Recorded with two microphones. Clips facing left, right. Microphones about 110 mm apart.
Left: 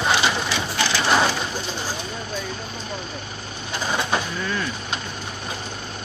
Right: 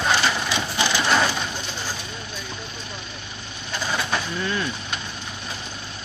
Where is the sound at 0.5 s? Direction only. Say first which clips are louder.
Even; 15° right (ahead or behind).